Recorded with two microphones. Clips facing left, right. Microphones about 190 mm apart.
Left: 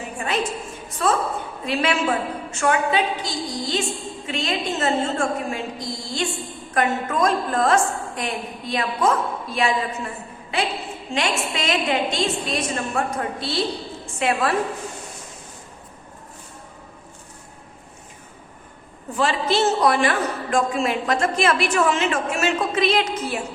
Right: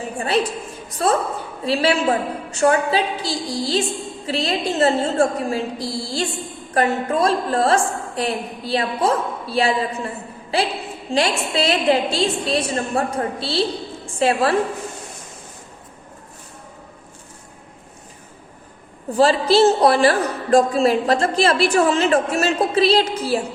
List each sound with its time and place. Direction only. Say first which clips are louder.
1.0 s a woman's voice: right 2 dB; 40° right (ahead or behind)
19.1 s a woman's voice: right 6 dB; 35° right (ahead or behind)